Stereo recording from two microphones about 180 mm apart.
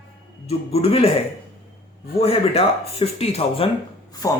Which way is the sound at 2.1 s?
35° left (ahead or behind).